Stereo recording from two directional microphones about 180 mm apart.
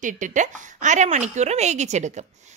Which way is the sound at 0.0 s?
45° right (ahead or behind).